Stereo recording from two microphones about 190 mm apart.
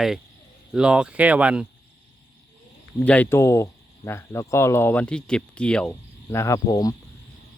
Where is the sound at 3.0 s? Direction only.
5° left (ahead or behind).